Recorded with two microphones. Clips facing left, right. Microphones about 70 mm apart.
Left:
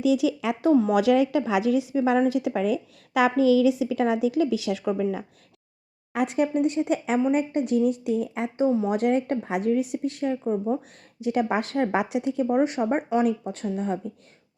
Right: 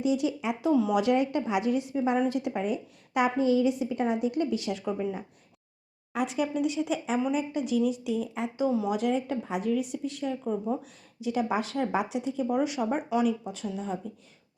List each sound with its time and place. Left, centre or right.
0.0 s speech: left
0.6 s speech: left
1.0 s speech: left
6.1 s speech: left
8.5 s speech: left
9.0 s speech: left
12.5 s speech: left